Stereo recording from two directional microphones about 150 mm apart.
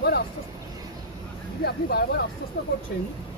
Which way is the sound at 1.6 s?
90° left.